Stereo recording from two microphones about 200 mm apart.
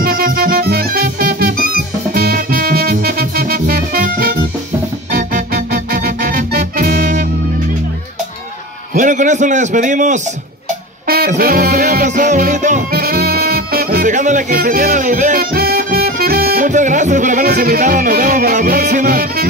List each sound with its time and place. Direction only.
0.0 s music: 45° right (ahead or behind)
8.9 s a man's voice: 40° right (ahead or behind)
11.1 s music: 50° right (ahead or behind)